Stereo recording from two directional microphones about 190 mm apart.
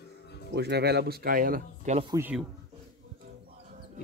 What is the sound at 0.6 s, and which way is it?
Speech, 60° right (ahead or behind).